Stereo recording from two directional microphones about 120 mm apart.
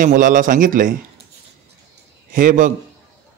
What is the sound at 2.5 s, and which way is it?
Speech, 90° right.